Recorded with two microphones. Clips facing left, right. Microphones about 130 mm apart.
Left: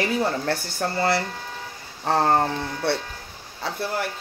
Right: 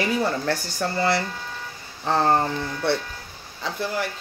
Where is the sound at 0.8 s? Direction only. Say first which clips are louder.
Even; 45° left (ahead or behind).